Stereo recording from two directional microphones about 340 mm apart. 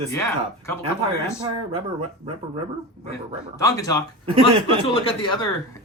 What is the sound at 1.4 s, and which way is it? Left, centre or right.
Speech, centre.